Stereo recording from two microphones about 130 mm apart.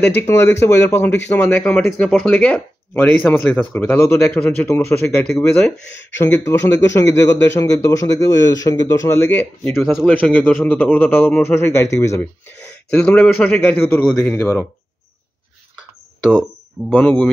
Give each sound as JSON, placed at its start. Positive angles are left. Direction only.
{"t": 0.1, "sound": "speech", "side_deg": 20}
{"t": 2.4, "sound": "speech", "side_deg": 10}
{"t": 5.4, "sound": "speech", "side_deg": 5}
{"t": 6.2, "sound": "a man's voice", "side_deg": 15}
{"t": 9.8, "sound": "speech", "side_deg": -5}
{"t": 10.3, "sound": "a man's voice", "side_deg": 15}
{"t": 12.2, "sound": "speech", "side_deg": 10}
{"t": 16.2, "sound": "speech", "side_deg": 0}